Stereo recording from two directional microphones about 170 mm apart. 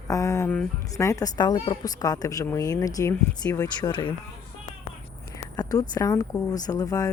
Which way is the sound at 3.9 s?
30° left (ahead or behind).